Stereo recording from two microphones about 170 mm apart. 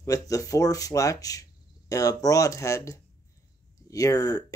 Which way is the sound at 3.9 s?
20° left (ahead or behind).